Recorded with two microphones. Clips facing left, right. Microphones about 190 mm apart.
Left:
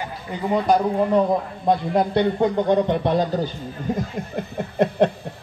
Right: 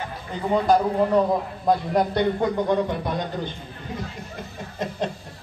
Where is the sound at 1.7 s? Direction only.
25° left (ahead or behind).